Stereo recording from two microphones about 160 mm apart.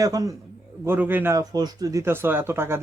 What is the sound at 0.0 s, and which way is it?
Speech, 20° right (ahead or behind).